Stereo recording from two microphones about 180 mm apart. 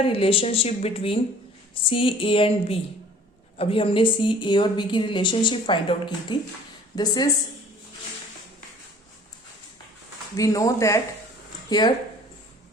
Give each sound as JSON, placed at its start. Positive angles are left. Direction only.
{"t": 0.0, "sound": "a woman's voice", "side_deg": 30}
{"t": 10.3, "sound": "a woman's voice", "side_deg": 20}